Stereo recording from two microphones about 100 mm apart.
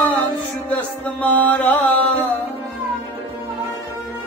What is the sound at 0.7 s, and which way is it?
Music, 15° left (ahead or behind).